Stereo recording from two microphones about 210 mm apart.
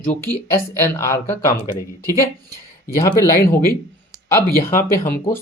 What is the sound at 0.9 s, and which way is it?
Speech, 15° left (ahead or behind).